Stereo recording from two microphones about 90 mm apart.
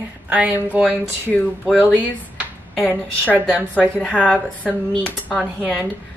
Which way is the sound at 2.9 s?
20° right (ahead or behind).